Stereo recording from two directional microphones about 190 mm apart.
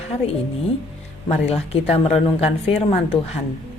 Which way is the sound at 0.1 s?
30° left (ahead or behind).